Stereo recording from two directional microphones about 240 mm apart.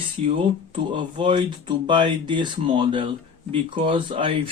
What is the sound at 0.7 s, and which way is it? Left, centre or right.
Speech, centre.